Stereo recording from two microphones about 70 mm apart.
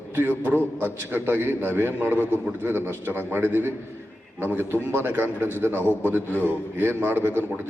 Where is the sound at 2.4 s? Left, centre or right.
Right.